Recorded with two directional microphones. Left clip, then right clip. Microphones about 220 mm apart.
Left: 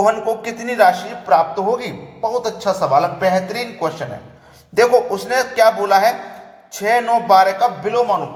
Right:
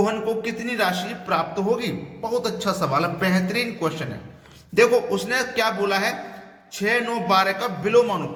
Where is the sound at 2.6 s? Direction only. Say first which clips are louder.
Left 11 dB; 15° right (ahead or behind).